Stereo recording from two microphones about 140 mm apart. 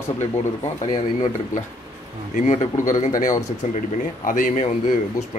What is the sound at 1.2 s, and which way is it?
A man's voice, 65° left (ahead or behind).